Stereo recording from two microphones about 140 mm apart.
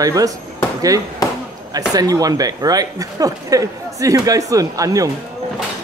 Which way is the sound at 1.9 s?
25° right (ahead or behind).